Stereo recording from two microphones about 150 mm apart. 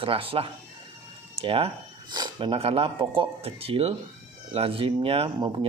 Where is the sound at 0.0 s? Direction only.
35° right (ahead or behind).